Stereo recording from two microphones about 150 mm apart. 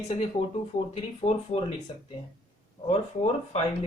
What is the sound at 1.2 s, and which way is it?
Speech, 30° left (ahead or behind).